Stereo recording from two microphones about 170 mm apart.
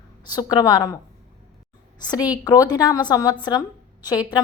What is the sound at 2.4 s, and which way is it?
A woman's voice, 20° left (ahead or behind).